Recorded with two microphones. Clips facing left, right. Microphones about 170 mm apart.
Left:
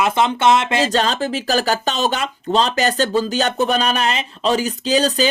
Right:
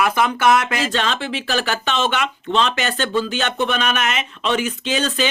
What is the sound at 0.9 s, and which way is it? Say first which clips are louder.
Speech: left 4 dB; 40° left (ahead or behind).